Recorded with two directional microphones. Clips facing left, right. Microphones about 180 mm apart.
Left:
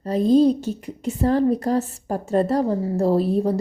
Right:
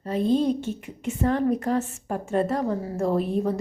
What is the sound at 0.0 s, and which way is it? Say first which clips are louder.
A woman's voice: left 6 dB; 40° left (ahead or behind).